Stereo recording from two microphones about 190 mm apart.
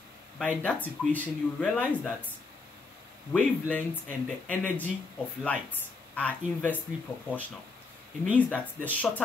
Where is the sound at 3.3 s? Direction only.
10° left (ahead or behind).